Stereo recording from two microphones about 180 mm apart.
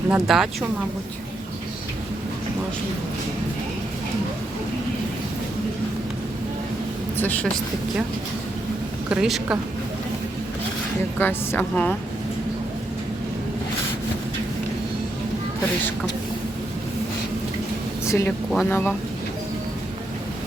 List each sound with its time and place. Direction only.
0.1 s speech: centre (ahead or behind)
9.0 s speech: 5° right (ahead or behind)
11.2 s a woman's voice: 10° left (ahead or behind)
18.0 s a woman's voice: 15° left (ahead or behind)